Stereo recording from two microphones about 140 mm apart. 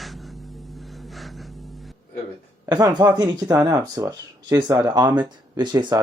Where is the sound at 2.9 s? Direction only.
30° right (ahead or behind).